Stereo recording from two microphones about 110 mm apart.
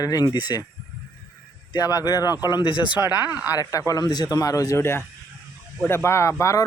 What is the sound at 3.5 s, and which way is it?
Speech, 30° left (ahead or behind).